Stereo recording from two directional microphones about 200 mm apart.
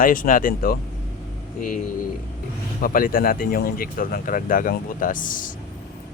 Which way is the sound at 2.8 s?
45° left (ahead or behind).